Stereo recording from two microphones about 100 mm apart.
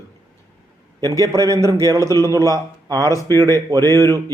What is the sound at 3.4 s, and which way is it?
Speech, 35° right (ahead or behind).